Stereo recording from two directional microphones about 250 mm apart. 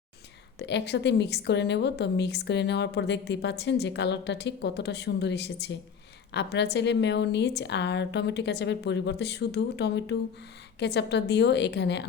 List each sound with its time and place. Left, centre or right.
0.6 s a woman's voice: left